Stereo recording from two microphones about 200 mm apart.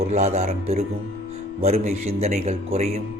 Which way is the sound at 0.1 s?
30° right (ahead or behind).